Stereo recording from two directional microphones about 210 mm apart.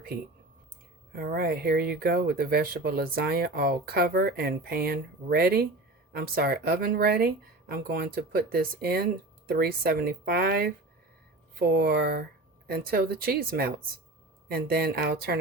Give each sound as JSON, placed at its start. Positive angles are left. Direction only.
{"t": 1.1, "sound": "speech", "side_deg": -45}